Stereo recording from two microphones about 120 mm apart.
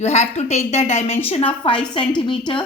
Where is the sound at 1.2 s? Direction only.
55° left (ahead or behind).